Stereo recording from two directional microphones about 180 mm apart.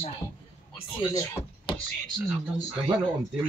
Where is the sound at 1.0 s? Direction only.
20° left (ahead or behind).